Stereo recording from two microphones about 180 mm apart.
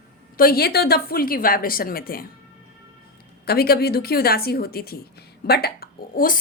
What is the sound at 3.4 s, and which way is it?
A woman's voice, 60° left (ahead or behind).